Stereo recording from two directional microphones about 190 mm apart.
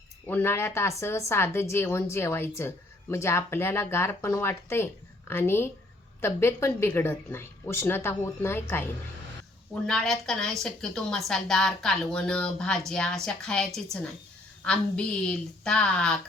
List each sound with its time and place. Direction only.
0.3 s a woman's voice: 10° left (ahead or behind)